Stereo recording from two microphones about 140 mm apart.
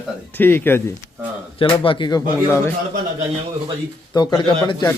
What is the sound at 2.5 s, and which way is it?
Speech, 20° left (ahead or behind).